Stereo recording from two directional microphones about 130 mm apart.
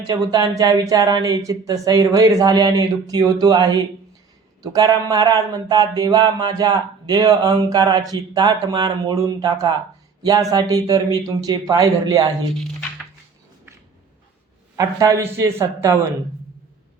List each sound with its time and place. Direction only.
0.1 s speech: 30° right (ahead or behind)
14.8 s speech: 25° right (ahead or behind)